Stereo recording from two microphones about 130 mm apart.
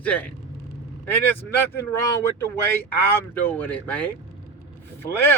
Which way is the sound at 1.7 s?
20° left (ahead or behind).